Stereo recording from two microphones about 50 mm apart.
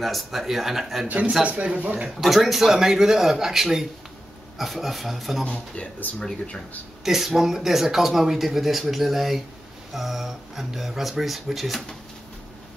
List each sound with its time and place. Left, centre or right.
0.0 s speech: centre
1.0 s speech: right
2.0 s speech: centre
5.4 s speech: left
7.1 s speech: centre